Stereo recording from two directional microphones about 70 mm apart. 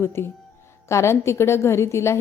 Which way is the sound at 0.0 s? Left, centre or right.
Left.